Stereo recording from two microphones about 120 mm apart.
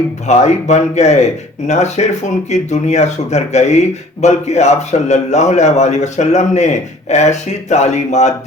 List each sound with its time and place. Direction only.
0.3 s speech: 70° left (ahead or behind)